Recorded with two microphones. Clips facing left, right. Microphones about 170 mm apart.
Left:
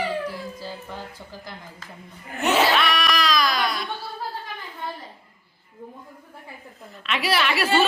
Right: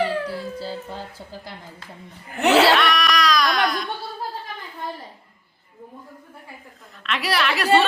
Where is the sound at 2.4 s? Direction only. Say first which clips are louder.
Right 5 dB; 70° right (ahead or behind).